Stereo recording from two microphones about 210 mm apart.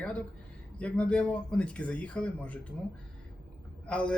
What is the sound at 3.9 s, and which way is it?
Speech, 5° left (ahead or behind).